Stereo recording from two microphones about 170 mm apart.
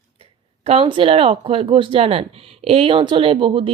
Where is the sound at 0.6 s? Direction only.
35° right (ahead or behind).